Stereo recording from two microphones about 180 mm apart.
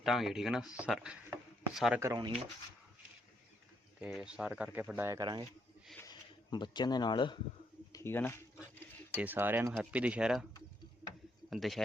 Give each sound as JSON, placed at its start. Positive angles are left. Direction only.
{"t": 0.0, "sound": "speech", "side_deg": 0}
{"t": 2.0, "sound": "speech", "side_deg": -20}
{"t": 4.0, "sound": "speech", "side_deg": -5}
{"t": 6.0, "sound": "speech", "side_deg": 25}
{"t": 7.9, "sound": "speech", "side_deg": 10}
{"t": 9.2, "sound": "speech", "side_deg": -10}
{"t": 11.5, "sound": "speech", "side_deg": 0}